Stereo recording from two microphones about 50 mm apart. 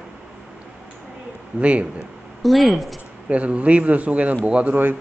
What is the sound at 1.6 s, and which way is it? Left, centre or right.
Speech, right.